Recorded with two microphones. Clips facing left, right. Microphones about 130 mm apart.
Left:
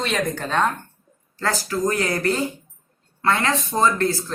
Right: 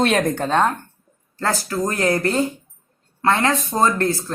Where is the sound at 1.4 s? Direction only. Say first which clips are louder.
Right 1 dB; 30° right (ahead or behind).